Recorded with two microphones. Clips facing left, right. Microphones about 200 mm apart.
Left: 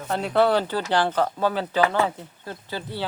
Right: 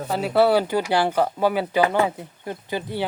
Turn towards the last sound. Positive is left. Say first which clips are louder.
# right 5 dB
turn(degrees=-15)  # may be behind; listen again after turning